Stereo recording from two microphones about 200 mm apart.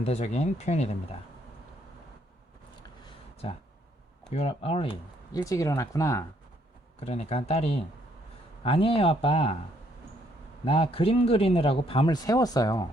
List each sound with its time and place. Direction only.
0.0 s speech: 35° left (ahead or behind)
4.3 s speech: 35° left (ahead or behind); by 6.2 s 15° left (ahead or behind)
7.0 s speech: 30° left (ahead or behind)
10.7 s speech: 30° left (ahead or behind)